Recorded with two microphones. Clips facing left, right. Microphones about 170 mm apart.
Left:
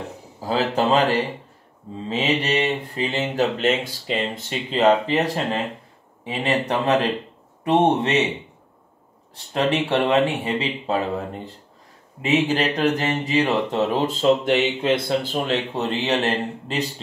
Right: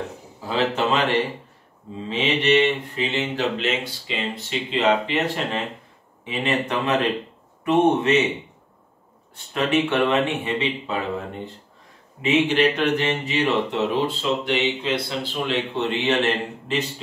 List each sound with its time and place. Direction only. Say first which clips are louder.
0.4 s speech: left 1 dB; 40° left (ahead or behind)
9.3 s speech: even; 35° left (ahead or behind)